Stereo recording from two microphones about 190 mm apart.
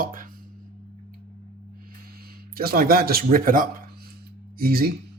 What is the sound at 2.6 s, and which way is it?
Speech, 50° right (ahead or behind).